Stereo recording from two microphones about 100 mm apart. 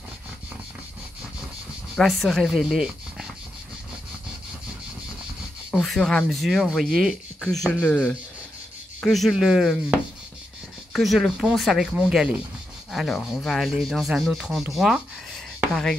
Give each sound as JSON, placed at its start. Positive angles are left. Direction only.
{"t": 2.0, "sound": "speech", "side_deg": 0}
{"t": 5.7, "sound": "speech", "side_deg": 5}